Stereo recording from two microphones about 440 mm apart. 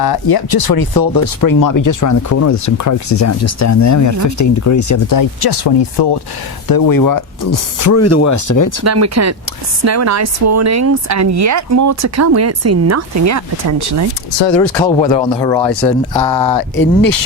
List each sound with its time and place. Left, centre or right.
0.0 s speech: left
6.7 s speech: left
8.8 s speech: right
14.3 s speech: left
15.2 s speech: centre
16.4 s speech: left